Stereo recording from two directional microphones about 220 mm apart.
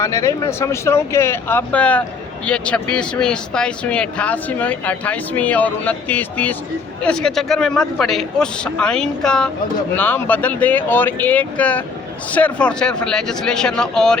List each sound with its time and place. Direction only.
0.0 s speech: 15° left (ahead or behind)